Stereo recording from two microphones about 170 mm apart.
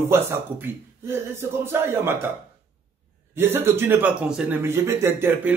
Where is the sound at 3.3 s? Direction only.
15° right (ahead or behind).